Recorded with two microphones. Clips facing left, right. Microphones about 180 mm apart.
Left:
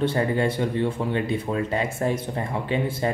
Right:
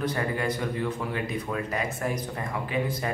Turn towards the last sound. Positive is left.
turn(degrees=30)  # may be behind; listen again after turning